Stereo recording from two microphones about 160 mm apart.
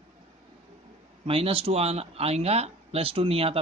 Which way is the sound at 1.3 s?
35° right (ahead or behind).